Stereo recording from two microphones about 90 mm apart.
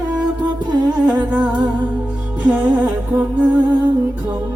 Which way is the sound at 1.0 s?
15° right (ahead or behind).